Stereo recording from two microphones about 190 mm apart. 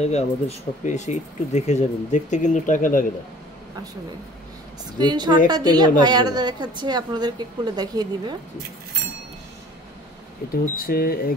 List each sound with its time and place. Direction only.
0.0 s speech: 35° left (ahead or behind)
4.9 s a woman's voice: 20° right (ahead or behind)
10.5 s speech: 50° left (ahead or behind)